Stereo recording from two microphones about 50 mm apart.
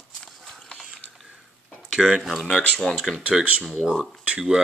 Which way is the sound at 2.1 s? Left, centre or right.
Centre.